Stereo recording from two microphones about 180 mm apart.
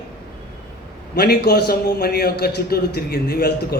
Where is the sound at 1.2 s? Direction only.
60° left (ahead or behind).